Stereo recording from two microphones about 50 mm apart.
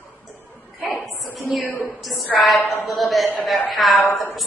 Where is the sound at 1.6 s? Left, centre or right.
Left.